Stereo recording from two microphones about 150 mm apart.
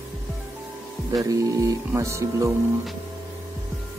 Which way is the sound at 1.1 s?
25° right (ahead or behind).